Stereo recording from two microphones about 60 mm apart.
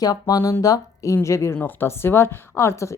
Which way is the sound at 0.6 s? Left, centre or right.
Left.